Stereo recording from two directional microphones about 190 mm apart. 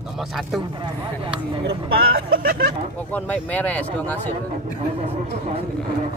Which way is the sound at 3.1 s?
10° left (ahead or behind).